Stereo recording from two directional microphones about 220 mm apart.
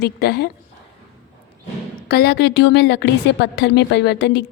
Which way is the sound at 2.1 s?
45° left (ahead or behind).